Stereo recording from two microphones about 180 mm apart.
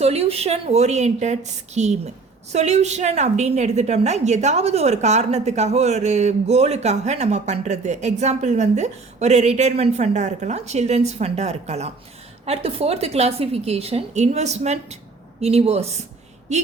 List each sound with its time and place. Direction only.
0.0 s a woman's voice: 35° right (ahead or behind)